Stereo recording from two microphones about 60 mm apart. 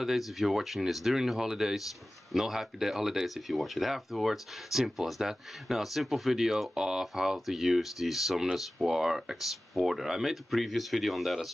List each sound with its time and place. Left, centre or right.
0.0 s speech: centre